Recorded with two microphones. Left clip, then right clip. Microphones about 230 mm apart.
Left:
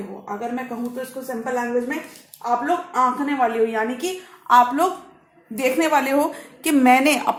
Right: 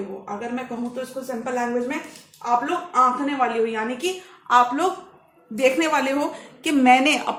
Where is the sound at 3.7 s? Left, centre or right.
Left.